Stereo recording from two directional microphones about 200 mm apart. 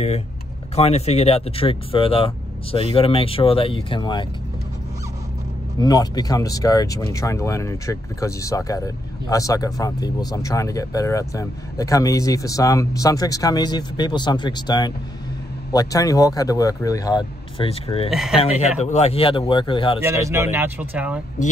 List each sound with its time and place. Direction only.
0.7 s speech: 30° left (ahead or behind)
5.8 s speech: 20° left (ahead or behind)
18.1 s speech: 5° right (ahead or behind)
18.8 s speech: 35° left (ahead or behind)
20.0 s speech: 15° right (ahead or behind)